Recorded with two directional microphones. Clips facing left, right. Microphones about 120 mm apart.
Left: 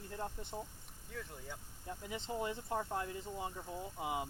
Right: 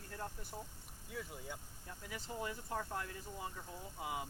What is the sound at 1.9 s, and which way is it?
Speech, 25° left (ahead or behind).